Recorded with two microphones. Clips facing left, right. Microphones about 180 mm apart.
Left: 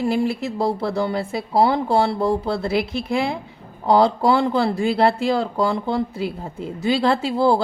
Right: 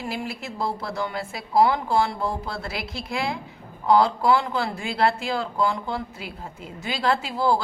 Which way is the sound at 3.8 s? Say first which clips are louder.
Left 3 dB; 30° left (ahead or behind).